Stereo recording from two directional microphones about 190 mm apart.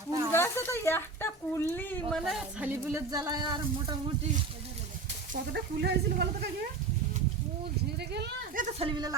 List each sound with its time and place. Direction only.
0.3 s speech: 10° left (ahead or behind); by 3.9 s 20° right (ahead or behind)
5.5 s speech: 60° right (ahead or behind)
8.5 s speech: 40° right (ahead or behind)
8.9 s speech: 20° right (ahead or behind)